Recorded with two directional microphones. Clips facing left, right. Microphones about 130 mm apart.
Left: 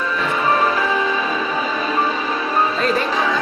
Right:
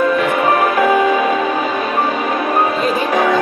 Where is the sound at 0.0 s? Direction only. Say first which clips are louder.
Right 7 dB; 60° right (ahead or behind).